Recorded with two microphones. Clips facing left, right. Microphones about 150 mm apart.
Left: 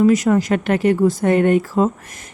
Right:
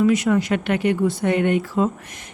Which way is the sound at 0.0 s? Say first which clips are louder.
Left 3 dB; 45° left (ahead or behind).